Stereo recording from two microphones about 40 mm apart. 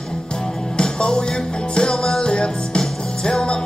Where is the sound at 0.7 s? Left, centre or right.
Left.